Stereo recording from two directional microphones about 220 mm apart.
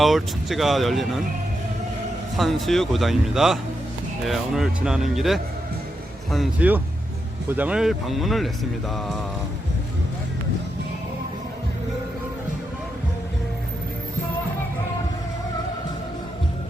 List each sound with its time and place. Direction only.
0.0 s speech: centre (ahead or behind)
2.3 s speech: centre (ahead or behind)